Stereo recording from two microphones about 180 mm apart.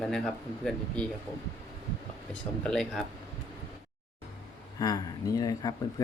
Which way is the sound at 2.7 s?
5° left (ahead or behind).